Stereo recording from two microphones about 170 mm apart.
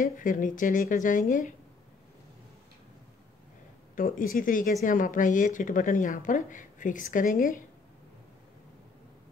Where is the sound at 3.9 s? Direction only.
55° left (ahead or behind).